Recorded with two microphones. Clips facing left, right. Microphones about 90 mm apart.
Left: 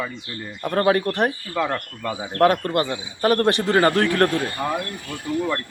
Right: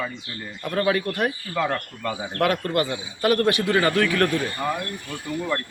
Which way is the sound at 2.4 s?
35° left (ahead or behind).